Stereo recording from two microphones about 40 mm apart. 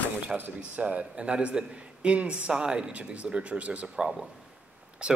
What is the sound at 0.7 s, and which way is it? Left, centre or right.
A man's voice, right.